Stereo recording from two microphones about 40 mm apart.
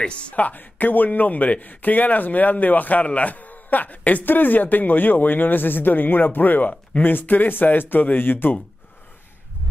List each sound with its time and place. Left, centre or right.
0.0 s speech: left
0.6 s speech: left